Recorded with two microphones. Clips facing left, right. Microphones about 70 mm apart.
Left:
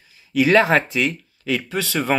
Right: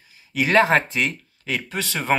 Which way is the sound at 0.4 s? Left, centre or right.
Right.